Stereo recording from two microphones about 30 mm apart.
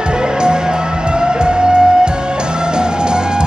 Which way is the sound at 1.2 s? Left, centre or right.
Right.